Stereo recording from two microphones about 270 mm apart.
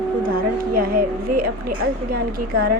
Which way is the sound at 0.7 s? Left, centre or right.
Right.